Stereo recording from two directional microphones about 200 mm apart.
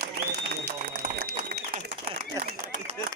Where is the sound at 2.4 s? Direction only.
15° right (ahead or behind).